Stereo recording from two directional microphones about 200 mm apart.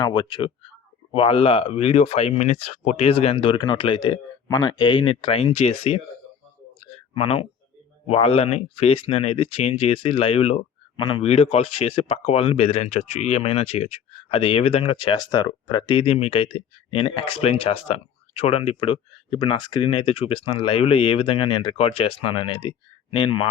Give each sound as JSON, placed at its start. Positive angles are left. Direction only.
{"t": 0.0, "sound": "speech", "side_deg": 20}
{"t": 6.7, "sound": "clicking", "side_deg": 30}
{"t": 8.1, "sound": "speech", "side_deg": 30}